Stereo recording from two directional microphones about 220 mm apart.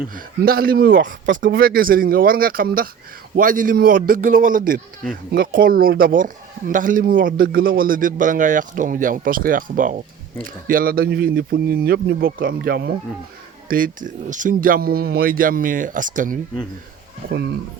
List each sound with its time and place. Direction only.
0.1 s speech: 40° right (ahead or behind)
17.2 s speech: 50° right (ahead or behind)